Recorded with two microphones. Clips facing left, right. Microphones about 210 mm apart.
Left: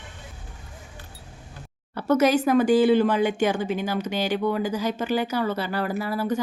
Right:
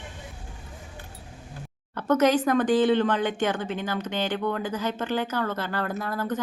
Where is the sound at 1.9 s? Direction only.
10° left (ahead or behind).